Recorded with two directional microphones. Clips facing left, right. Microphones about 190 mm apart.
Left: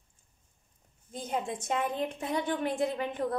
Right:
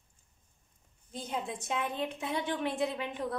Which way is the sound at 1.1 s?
45° left (ahead or behind).